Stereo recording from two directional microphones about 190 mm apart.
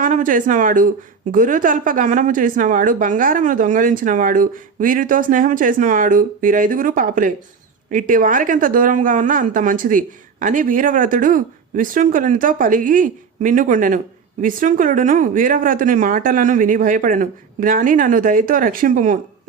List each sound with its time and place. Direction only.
0.0 s a woman's voice: 45° right (ahead or behind)